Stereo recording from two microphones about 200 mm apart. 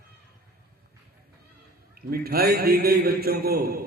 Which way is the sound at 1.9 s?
50° right (ahead or behind).